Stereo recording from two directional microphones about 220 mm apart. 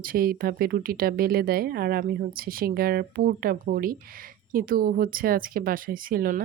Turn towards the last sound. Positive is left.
turn(degrees=-40)  # may be behind; listen again after turning